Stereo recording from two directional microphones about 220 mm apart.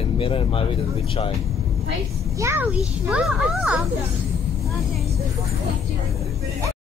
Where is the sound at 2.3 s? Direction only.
10° right (ahead or behind).